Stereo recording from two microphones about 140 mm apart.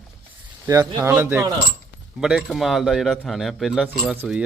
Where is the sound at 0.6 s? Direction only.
20° right (ahead or behind).